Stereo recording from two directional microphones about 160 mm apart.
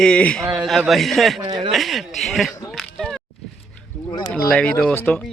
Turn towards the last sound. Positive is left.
turn(degrees=5)  # may be behind; listen again after turning